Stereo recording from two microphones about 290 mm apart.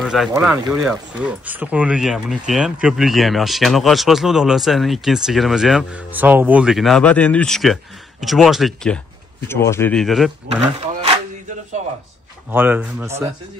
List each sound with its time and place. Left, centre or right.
0.0 s speech: centre
12.4 s speech: centre